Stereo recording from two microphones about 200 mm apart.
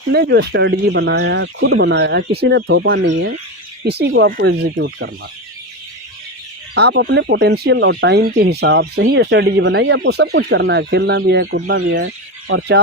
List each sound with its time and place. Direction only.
0.1 s speech: 55° right (ahead or behind)
3.8 s speech: 55° right (ahead or behind)
6.7 s speech: 55° right (ahead or behind)